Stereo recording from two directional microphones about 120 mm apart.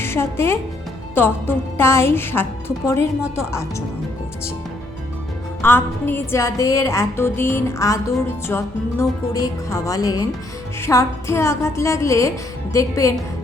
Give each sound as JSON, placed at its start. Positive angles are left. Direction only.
{"t": 0.0, "sound": "a woman's voice", "side_deg": 20}
{"t": 5.6, "sound": "a woman's voice", "side_deg": 20}